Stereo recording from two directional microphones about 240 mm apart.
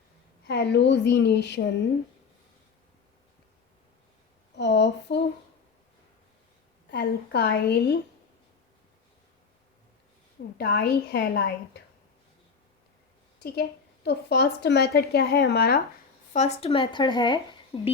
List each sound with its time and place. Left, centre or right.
0.4 s a woman's voice: left
4.5 s a woman's voice: left
6.9 s a woman's voice: left
10.6 s a woman's voice: left
13.4 s a woman's voice: left
16.3 s speech: left